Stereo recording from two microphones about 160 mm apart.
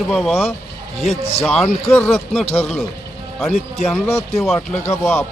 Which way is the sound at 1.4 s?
Centre (ahead or behind).